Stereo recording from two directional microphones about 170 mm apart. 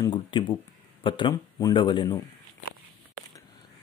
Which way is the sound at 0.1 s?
30° left (ahead or behind).